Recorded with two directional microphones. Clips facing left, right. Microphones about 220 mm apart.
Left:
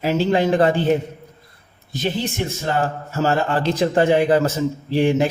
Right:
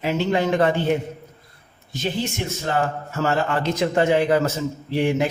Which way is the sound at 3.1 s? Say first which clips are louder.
Left 3 dB; 30° left (ahead or behind).